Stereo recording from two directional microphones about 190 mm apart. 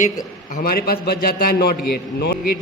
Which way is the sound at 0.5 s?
50° left (ahead or behind).